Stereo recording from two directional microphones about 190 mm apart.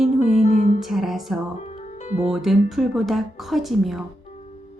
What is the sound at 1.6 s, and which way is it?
Music, 35° left (ahead or behind).